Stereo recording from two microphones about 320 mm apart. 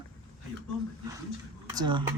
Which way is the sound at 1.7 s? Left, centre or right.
Centre.